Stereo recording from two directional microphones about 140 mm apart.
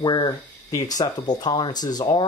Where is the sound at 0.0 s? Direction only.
30° left (ahead or behind).